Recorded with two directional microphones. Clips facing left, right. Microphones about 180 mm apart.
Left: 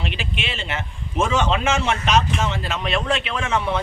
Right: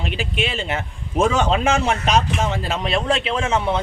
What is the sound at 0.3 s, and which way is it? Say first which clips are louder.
Speech: right 5 dB; 40° right (ahead or behind).